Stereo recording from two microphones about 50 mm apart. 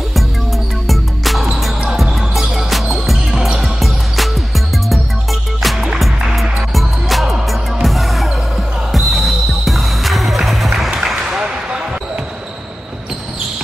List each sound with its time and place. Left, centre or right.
0.8 s music: centre
5.6 s music: centre
11.2 s basketball bounce: centre